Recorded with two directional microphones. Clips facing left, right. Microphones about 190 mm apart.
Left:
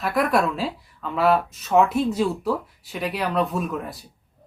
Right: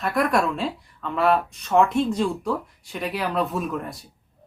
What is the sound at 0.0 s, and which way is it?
Speech, centre (ahead or behind).